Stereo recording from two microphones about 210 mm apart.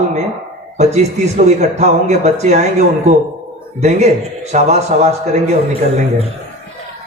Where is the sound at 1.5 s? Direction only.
35° right (ahead or behind).